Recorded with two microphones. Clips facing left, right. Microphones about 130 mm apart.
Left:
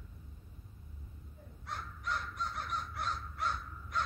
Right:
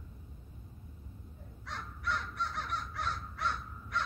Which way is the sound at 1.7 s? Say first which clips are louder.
Right 2 dB; 85° right.